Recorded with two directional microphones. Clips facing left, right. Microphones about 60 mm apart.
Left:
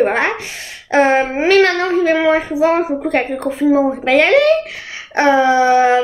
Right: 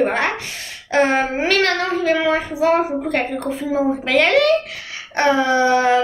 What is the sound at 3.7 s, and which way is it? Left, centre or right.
A woman's voice, left.